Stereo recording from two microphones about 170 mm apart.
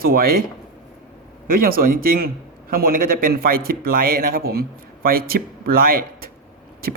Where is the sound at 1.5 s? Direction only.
60° right (ahead or behind).